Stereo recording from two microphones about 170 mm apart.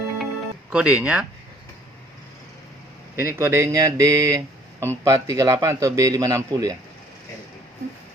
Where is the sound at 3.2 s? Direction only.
15° right (ahead or behind).